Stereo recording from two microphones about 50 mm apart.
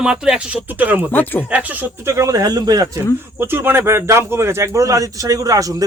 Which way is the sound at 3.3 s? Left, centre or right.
Right.